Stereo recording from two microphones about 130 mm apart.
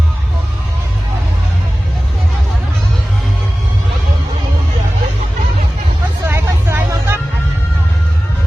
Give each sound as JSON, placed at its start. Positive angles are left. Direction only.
{"t": 6.2, "sound": "vehicle", "side_deg": -20}